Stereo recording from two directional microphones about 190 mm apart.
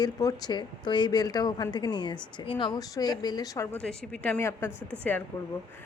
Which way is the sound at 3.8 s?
5° left (ahead or behind).